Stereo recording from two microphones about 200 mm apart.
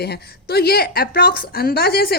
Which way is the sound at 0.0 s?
55° left (ahead or behind).